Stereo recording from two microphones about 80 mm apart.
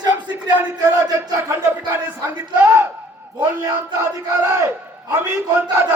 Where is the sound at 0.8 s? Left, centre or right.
Right.